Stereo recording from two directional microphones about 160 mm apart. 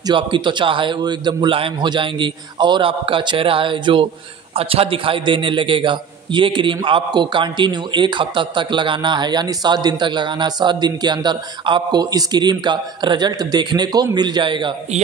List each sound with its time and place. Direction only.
0.0 s a man's voice: 30° right (ahead or behind)